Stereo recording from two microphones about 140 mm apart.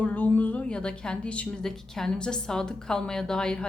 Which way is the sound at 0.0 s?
10° left (ahead or behind).